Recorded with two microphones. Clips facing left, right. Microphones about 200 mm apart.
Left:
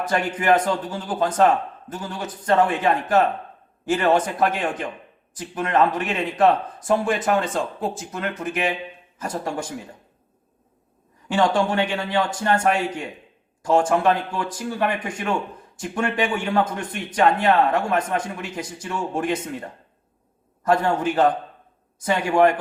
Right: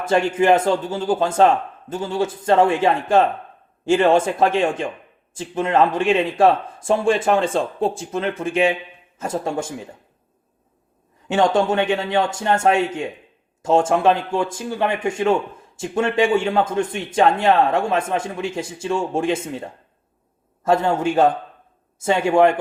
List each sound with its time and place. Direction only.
0.0 s speech: 25° right (ahead or behind)
11.3 s speech: 25° right (ahead or behind)
20.7 s speech: 25° right (ahead or behind)